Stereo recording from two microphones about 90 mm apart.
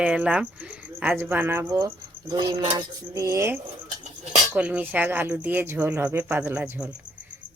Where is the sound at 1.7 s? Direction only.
35° right (ahead or behind).